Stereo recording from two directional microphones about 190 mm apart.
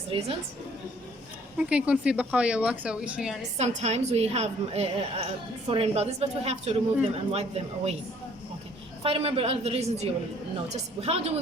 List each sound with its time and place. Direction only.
0.1 s a woman's voice: 30° right (ahead or behind)
1.5 s speech: 5° right (ahead or behind)
3.6 s a woman's voice: 35° right (ahead or behind)
9.0 s a woman's voice: 30° right (ahead or behind)